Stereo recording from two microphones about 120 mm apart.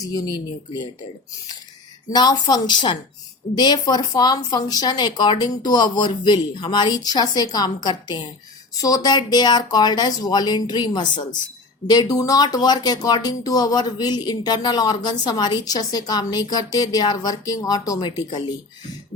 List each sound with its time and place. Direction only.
0.0 s speech: 30° left (ahead or behind)
2.0 s speech: 35° left (ahead or behind)